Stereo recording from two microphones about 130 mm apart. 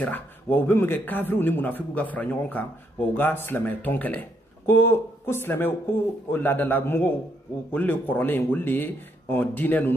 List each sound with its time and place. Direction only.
0.0 s speech: 15° left (ahead or behind)